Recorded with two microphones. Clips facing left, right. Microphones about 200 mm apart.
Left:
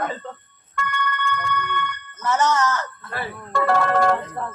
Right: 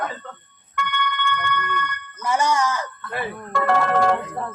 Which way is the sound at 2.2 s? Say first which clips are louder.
Left 1 dB; 10° right (ahead or behind).